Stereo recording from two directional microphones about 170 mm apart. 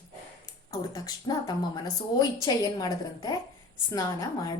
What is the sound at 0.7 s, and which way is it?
A woman's voice, 20° left (ahead or behind).